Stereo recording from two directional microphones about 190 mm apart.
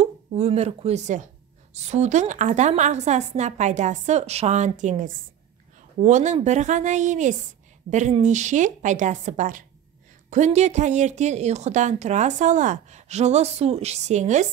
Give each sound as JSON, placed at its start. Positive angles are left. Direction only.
{"t": 0.0, "sound": "a woman's voice", "side_deg": -35}